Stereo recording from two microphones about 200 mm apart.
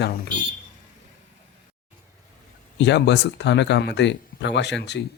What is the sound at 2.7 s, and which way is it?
Speech, 60° left (ahead or behind).